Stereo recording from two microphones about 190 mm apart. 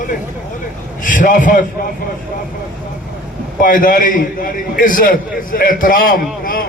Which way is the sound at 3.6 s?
45° left (ahead or behind).